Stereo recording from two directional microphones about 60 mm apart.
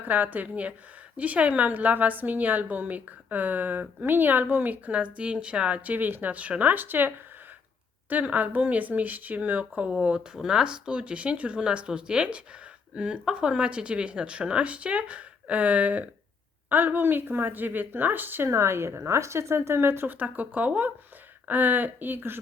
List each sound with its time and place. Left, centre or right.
0.0 s a woman's voice: right
8.1 s a woman's voice: right
10.3 s a woman's voice: centre; by 18.4 s right
18.4 s speech: right